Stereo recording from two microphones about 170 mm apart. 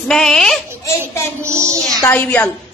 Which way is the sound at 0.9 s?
15° left (ahead or behind).